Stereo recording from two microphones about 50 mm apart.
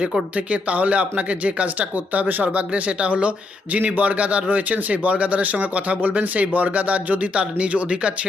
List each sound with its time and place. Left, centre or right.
0.3 s speech: right